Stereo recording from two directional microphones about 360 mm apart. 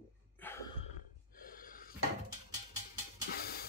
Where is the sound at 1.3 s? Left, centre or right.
Left.